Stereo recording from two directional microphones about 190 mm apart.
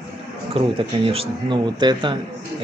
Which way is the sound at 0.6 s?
30° right (ahead or behind).